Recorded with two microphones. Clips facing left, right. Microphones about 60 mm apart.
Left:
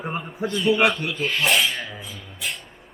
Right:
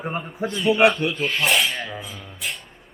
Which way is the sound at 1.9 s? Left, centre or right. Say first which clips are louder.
Right 3 dB; centre.